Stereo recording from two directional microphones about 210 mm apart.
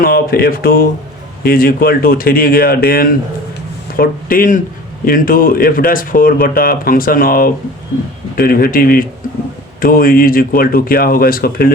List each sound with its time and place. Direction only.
0.0 s speech: 45° left (ahead or behind)